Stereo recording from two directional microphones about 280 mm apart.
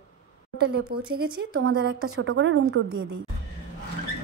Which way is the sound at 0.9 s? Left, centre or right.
Right.